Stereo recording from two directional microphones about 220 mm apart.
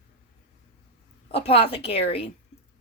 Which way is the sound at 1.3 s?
25° left (ahead or behind).